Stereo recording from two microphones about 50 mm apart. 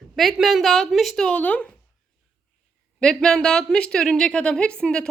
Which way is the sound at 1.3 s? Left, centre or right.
Left.